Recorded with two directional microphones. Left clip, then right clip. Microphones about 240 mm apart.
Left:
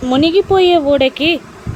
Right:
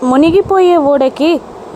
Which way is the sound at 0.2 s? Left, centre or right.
Right.